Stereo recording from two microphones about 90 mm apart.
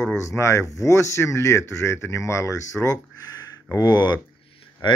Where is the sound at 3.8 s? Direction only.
50° left (ahead or behind).